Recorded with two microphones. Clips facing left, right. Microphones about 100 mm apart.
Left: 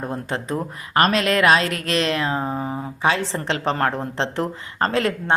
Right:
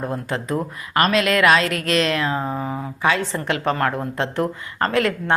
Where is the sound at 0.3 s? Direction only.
25° left (ahead or behind).